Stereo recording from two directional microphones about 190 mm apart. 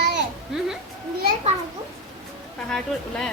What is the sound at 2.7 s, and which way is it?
Speech, 5° left (ahead or behind).